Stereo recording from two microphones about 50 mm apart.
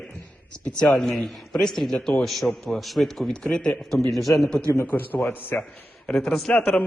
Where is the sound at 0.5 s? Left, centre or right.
Left.